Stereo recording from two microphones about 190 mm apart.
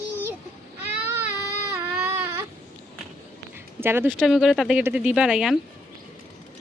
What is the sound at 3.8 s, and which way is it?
Speech, 10° right (ahead or behind).